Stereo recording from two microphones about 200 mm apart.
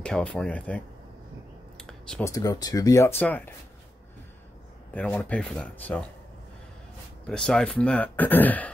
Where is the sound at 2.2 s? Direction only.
15° left (ahead or behind).